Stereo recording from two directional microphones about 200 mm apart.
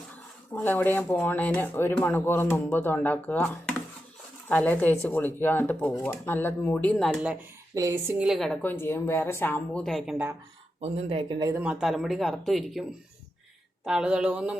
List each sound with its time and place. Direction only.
0.5 s speech: 10° left (ahead or behind)
7.8 s a woman's voice: 15° right (ahead or behind)
8.3 s speech: centre (ahead or behind)
10.8 s speech: 25° right (ahead or behind)
11.6 s speech: 5° right (ahead or behind)
13.8 s speech: 5° right (ahead or behind)